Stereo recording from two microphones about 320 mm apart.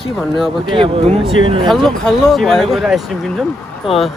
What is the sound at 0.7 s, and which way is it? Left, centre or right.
Speech, centre.